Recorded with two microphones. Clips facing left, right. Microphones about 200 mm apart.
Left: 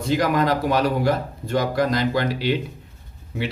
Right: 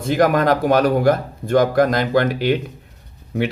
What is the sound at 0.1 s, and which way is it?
Speech, 50° right (ahead or behind).